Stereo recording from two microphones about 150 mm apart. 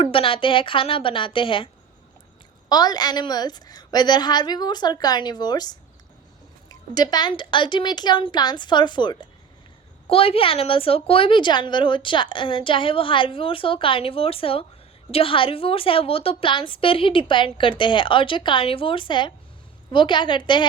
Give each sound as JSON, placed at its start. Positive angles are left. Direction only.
{"t": 0.0, "sound": "a woman's voice", "side_deg": 35}